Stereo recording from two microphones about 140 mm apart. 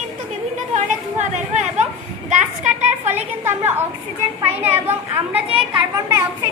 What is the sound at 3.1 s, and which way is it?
A woman's voice, 15° right (ahead or behind).